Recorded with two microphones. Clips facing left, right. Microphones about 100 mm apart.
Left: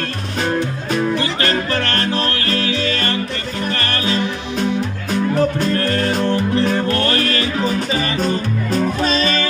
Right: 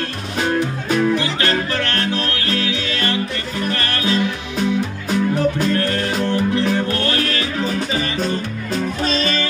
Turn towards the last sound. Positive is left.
turn(degrees=40)  # may be behind; listen again after turning